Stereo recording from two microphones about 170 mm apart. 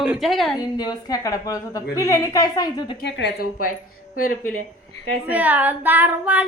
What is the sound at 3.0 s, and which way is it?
Speech, 80° left.